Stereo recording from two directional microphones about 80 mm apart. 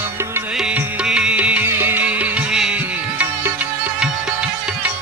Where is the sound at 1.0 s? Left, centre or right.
Centre.